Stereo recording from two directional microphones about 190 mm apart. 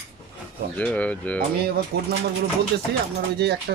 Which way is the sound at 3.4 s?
60° right (ahead or behind).